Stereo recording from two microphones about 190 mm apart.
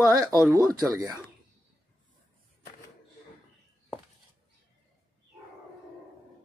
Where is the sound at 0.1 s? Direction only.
20° right (ahead or behind).